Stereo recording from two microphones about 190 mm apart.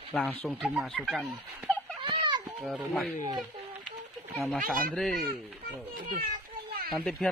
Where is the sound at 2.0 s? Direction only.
25° right (ahead or behind).